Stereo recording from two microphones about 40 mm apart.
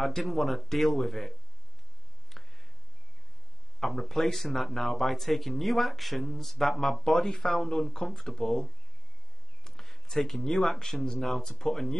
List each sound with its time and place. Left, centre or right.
0.0 s speech: centre
2.2 s a sound: centre
3.8 s speech: centre
9.7 s speech: centre